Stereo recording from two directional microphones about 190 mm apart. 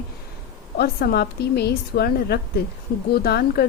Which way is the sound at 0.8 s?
55° left (ahead or behind).